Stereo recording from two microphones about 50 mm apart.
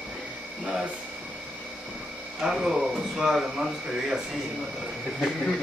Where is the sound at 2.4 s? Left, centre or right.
Centre.